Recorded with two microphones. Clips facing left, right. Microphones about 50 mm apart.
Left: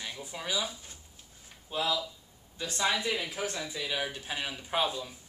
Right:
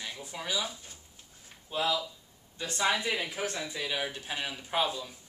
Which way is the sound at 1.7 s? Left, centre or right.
Centre.